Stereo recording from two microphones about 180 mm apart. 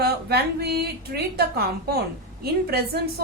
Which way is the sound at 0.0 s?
60° right (ahead or behind).